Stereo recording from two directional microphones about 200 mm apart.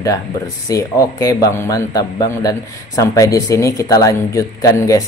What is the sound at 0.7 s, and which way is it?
Speech, 15° left (ahead or behind).